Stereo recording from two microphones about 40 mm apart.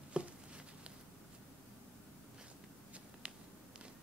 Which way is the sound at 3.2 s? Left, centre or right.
Right.